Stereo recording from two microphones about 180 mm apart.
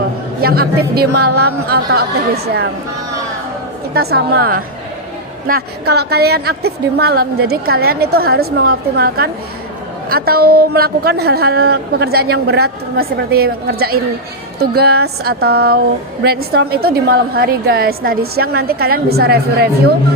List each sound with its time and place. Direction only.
0.4 s a woman's voice: 55° right (ahead or behind)
3.9 s a woman's voice: 60° right (ahead or behind)